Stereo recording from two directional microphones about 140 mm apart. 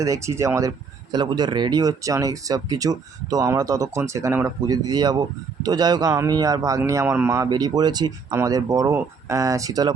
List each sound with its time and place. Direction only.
0.0 s speech: 20° right (ahead or behind)
1.1 s speech: 30° right (ahead or behind)